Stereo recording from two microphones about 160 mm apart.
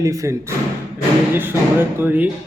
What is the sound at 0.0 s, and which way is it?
A man's voice, 20° right (ahead or behind).